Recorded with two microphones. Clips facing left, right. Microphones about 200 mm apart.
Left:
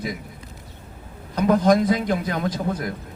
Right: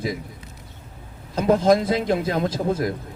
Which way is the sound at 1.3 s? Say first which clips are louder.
Even; 25° right (ahead or behind).